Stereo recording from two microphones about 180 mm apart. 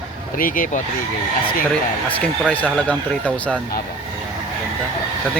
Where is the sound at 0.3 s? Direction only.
50° left (ahead or behind).